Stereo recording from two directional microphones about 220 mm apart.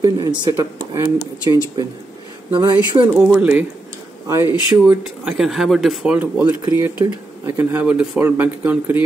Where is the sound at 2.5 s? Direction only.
20° right (ahead or behind).